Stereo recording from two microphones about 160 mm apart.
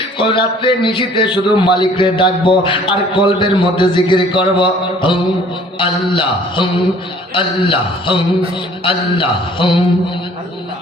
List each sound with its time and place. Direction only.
0.2 s a man's voice: 30° left (ahead or behind)